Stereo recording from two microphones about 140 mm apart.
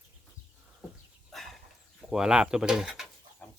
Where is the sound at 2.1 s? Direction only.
5° right (ahead or behind).